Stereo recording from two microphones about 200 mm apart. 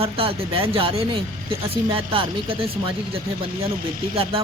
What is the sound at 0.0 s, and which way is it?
Speech, 30° right (ahead or behind).